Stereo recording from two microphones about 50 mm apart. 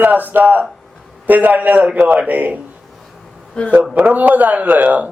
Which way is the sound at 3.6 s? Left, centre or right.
Centre.